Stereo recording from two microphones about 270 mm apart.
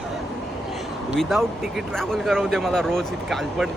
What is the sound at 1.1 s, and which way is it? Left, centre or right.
Speech, centre.